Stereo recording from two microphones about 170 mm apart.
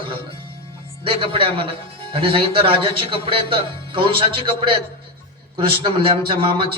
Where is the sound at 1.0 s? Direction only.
30° right (ahead or behind).